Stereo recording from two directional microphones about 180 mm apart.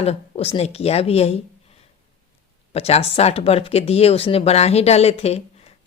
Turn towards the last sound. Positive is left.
turn(degrees=35)  # may be behind; listen again after turning